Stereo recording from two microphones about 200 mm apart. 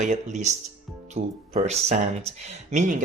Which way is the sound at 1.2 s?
50° right (ahead or behind).